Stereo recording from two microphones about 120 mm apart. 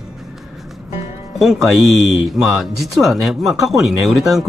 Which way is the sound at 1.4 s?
Centre (ahead or behind).